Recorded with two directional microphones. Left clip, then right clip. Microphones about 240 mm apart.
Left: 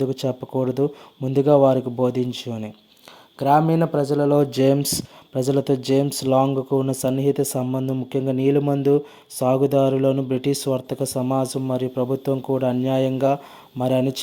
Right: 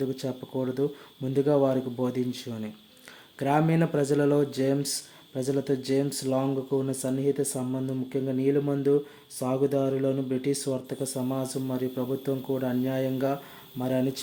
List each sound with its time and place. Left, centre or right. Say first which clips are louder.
0.0 s speech: left 8 dB; left
4.4 s speech: left 8 dB; left